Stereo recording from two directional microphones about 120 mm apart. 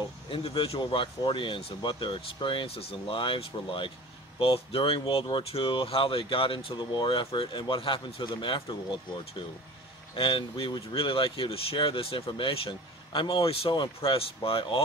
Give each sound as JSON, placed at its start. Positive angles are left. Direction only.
{"t": 0.3, "sound": "speech", "side_deg": 50}